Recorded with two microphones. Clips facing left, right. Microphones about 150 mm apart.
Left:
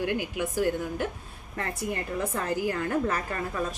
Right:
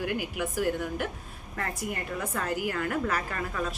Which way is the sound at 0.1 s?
25° left (ahead or behind).